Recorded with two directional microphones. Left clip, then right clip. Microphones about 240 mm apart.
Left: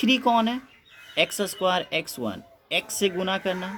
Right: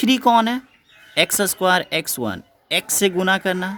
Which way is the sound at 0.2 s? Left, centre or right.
Right.